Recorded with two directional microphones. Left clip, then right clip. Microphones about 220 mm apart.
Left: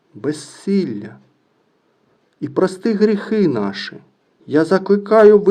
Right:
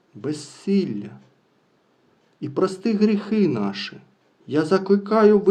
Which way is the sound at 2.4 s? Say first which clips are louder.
Left 5 dB; 40° left (ahead or behind).